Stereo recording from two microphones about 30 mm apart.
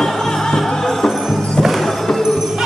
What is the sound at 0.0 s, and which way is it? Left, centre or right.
Music, centre.